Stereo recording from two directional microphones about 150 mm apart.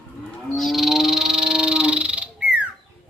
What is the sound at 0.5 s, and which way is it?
Frog, centre (ahead or behind).